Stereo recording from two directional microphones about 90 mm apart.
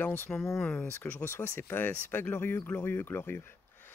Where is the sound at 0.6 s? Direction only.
15° left (ahead or behind).